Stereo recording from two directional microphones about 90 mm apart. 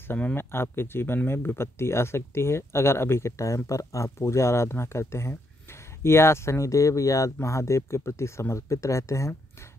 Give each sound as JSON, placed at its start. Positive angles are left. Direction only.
{"t": 0.0, "sound": "speech", "side_deg": 20}